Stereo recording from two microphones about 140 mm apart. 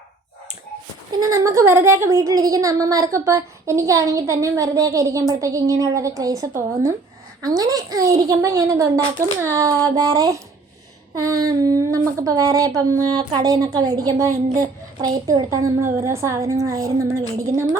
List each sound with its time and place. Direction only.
1.2 s a woman's voice: 20° right (ahead or behind)